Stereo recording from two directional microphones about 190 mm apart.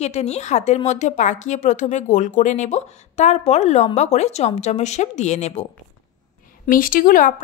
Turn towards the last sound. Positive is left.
turn(degrees=45)  # may be behind; listen again after turning